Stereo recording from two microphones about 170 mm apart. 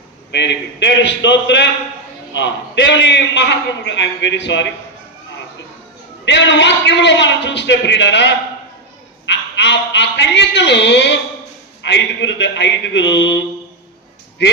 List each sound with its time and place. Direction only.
0.3 s a man's voice: 90° left
6.2 s a man's voice: 90° left